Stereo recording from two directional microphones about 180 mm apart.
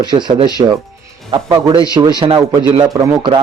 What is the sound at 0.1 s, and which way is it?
A man's voice, 25° right (ahead or behind).